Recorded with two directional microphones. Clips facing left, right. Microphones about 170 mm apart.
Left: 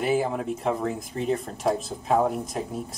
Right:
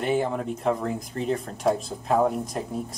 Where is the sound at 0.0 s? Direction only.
5° left (ahead or behind).